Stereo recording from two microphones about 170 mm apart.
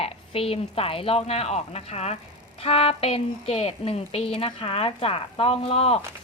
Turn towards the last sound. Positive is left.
turn(degrees=35)  # may be behind; listen again after turning